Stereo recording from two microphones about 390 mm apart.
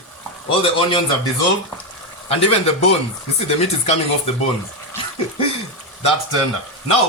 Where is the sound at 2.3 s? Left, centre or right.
Centre.